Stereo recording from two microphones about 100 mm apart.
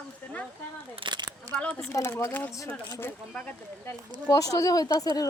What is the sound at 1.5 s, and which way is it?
Speech, 10° left (ahead or behind).